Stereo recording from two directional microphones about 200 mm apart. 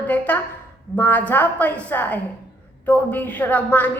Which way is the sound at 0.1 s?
10° left (ahead or behind).